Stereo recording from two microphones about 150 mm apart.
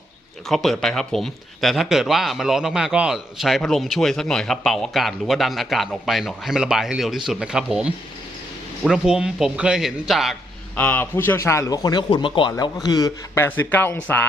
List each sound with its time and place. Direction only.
0.4 s speech: centre (ahead or behind)
10.8 s a man's voice: 15° left (ahead or behind)